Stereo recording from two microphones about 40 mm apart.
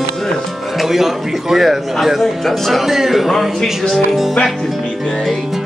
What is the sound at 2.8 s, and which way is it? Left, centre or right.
A man's voice, centre.